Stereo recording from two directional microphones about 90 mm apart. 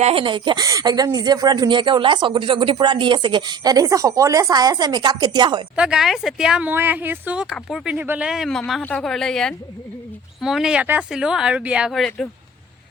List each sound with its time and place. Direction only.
0.1 s speech: 80° right; by 0.6 s 60° right (ahead or behind)
0.6 s speech: 40° right (ahead or behind); by 5.6 s 60° right (ahead or behind)
5.7 s speech: 10° right (ahead or behind)
6.7 s speech: 20° right (ahead or behind)
8.4 s speech: 5° left (ahead or behind)
10.4 s speech: 5° right (ahead or behind)
11.9 s speech: 5° left (ahead or behind)